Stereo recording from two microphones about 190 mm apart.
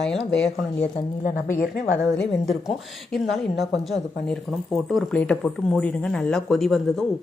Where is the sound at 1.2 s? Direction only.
45° left (ahead or behind).